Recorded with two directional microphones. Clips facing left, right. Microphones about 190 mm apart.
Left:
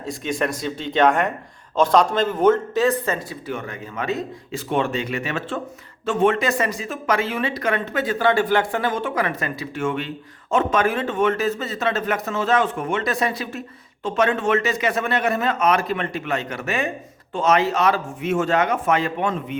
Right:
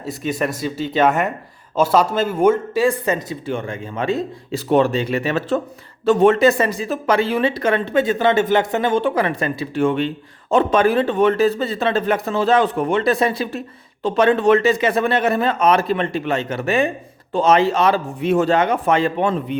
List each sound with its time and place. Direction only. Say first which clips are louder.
0.0 s speech: right 2 dB; 5° right (ahead or behind)
3.2 s speech: right 5 dB; 25° right (ahead or behind)